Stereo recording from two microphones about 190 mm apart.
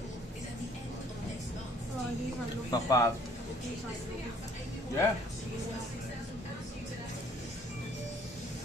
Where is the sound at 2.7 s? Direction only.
15° left (ahead or behind).